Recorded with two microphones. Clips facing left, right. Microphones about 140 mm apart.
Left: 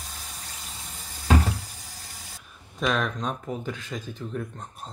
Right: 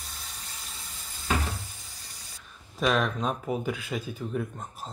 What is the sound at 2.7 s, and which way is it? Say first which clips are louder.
Speech: right 1 dB; centre (ahead or behind).